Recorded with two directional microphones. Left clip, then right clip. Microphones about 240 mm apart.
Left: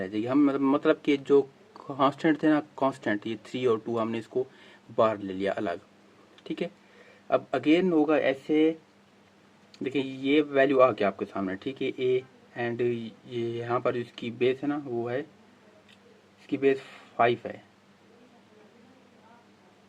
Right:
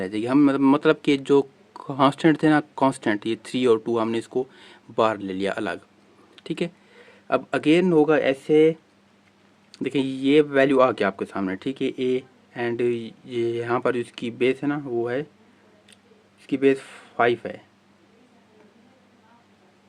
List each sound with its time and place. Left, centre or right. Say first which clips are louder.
0.0 s speech: right 5 dB; right
6.3 s a sound: right 5 dB; right
7.3 s speech: right 3 dB; right
9.7 s speech: right 5 dB; right
16.5 s speech: right 5 dB; right